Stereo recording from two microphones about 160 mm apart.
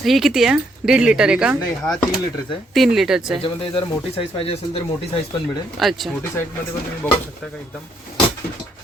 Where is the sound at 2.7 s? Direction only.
Centre (ahead or behind).